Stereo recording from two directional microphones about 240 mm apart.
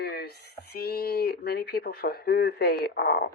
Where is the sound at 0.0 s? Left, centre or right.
Left.